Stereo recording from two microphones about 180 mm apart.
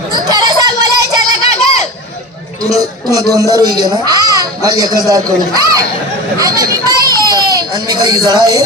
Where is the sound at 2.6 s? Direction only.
20° right (ahead or behind).